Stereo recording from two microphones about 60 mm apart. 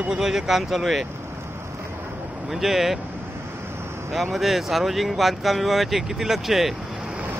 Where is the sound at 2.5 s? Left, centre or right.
Centre.